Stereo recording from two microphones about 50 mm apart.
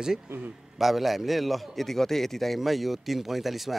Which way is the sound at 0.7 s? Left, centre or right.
Centre.